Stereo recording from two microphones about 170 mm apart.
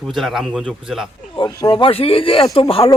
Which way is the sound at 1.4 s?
25° left (ahead or behind).